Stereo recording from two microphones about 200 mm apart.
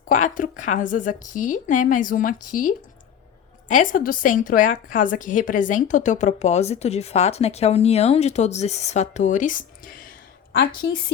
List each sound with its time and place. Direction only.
0.1 s a woman's voice: 40° left (ahead or behind)